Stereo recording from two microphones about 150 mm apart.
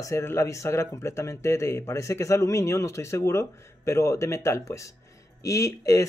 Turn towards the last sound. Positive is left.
turn(degrees=20)  # may be behind; listen again after turning